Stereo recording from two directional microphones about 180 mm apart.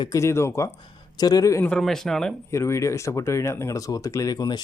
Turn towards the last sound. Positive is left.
turn(degrees=20)  # may be behind; listen again after turning